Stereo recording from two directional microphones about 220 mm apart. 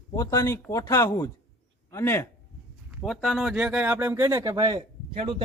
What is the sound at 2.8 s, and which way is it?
Speech, centre (ahead or behind).